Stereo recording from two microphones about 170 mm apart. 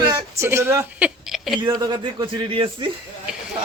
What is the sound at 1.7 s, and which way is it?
Speech, 25° right (ahead or behind).